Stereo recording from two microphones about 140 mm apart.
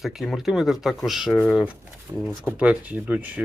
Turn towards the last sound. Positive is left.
turn(degrees=-10)  # may be behind; listen again after turning